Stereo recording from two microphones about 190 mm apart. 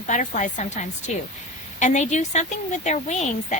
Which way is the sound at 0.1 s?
40° left (ahead or behind).